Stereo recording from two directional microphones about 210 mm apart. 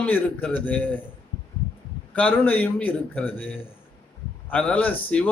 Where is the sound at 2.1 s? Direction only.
5° left (ahead or behind).